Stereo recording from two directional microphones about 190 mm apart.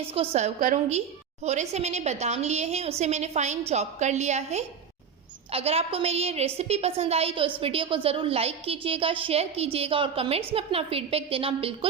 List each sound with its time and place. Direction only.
0.1 s a woman's voice: 35° right (ahead or behind)